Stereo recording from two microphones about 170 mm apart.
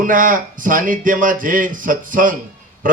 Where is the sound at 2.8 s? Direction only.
50° right (ahead or behind).